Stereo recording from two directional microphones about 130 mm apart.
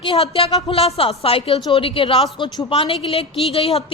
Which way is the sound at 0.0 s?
40° left (ahead or behind).